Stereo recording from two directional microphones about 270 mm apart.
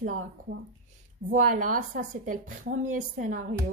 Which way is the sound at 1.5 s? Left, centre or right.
Right.